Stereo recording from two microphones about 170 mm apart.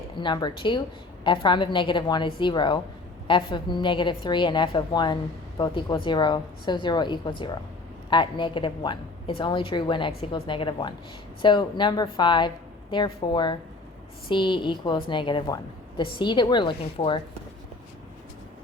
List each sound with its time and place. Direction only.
0.2 s a woman's voice: 25° left (ahead or behind)